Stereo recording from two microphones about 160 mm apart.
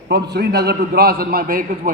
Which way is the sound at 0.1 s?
90° right.